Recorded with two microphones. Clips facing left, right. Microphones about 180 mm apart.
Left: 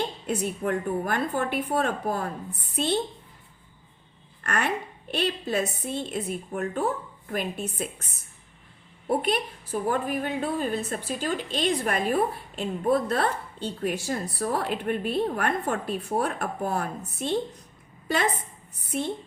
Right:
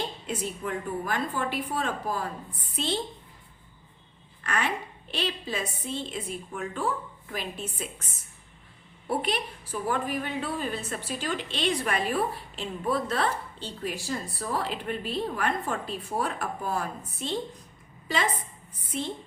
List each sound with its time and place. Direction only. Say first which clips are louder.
0.3 s a woman's voice: left 7 dB; 55° left (ahead or behind)
4.4 s a woman's voice: left 2 dB; 50° left (ahead or behind)
6.5 s a woman's voice: left 3 dB; 45° left (ahead or behind)
9.0 s a woman's voice: left 4 dB; 45° left (ahead or behind)
18.9 s a woman's voice: left 4 dB; 55° left (ahead or behind)